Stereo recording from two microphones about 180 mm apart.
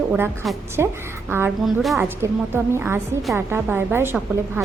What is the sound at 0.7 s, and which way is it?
A woman's voice, 15° right (ahead or behind).